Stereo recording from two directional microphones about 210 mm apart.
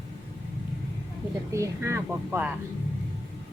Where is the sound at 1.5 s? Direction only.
15° right (ahead or behind).